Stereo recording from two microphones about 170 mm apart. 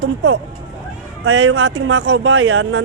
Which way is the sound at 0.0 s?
90° right.